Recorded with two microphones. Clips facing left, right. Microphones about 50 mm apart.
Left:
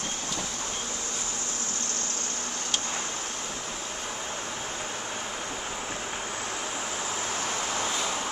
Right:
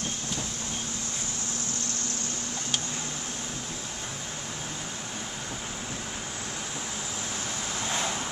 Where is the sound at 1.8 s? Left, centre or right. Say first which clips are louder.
Left 1 dB; left.